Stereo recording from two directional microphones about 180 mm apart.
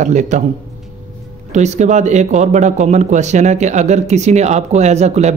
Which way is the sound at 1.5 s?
40° right (ahead or behind).